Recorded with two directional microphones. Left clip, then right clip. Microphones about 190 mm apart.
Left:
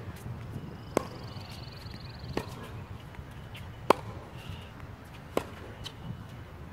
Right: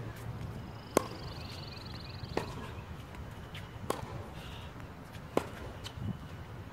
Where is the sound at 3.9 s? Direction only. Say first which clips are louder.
Left 13 dB; 55° right (ahead or behind).